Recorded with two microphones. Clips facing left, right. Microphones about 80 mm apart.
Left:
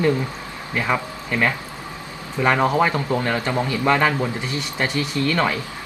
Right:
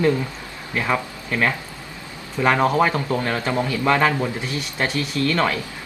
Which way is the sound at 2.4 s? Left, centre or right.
Centre.